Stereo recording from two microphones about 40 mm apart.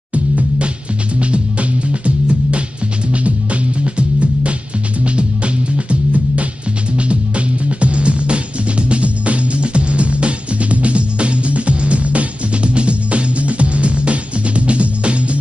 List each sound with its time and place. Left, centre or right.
0.1 s music: right
3.8 s music: right